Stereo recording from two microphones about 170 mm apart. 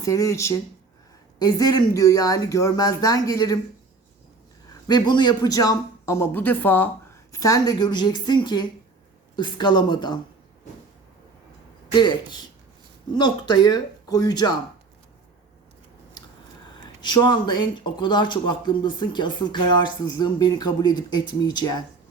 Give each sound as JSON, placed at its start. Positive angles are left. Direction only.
{"t": 0.0, "sound": "speech", "side_deg": 20}
{"t": 4.9, "sound": "speech", "side_deg": 25}
{"t": 11.9, "sound": "speech", "side_deg": 25}
{"t": 17.0, "sound": "speech", "side_deg": 25}